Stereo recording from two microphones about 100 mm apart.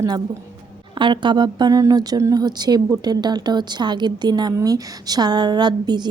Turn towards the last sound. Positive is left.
turn(degrees=-45)  # may be behind; listen again after turning